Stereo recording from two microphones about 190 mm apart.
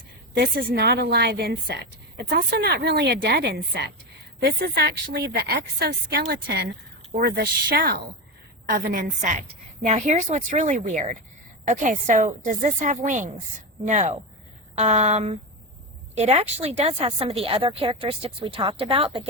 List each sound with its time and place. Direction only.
0.3 s a woman's voice: 55° right (ahead or behind); by 19.2 s 30° right (ahead or behind)